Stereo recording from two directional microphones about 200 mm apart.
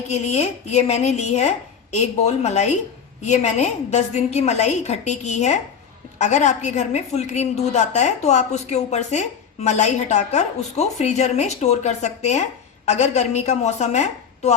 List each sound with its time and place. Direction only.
0.1 s a woman's voice: 35° left (ahead or behind)